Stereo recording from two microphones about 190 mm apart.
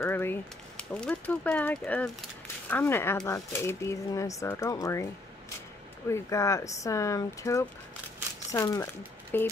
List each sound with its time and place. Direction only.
0.0 s speech: 10° left (ahead or behind)
6.0 s speech: 15° left (ahead or behind)